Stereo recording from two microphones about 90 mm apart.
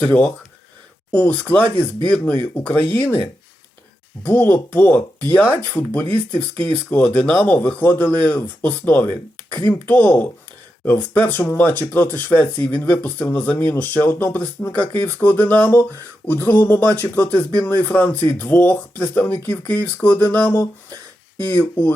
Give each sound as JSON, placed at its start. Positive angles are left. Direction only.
{"t": 0.0, "sound": "speech", "side_deg": 15}
{"t": 4.2, "sound": "speech", "side_deg": 20}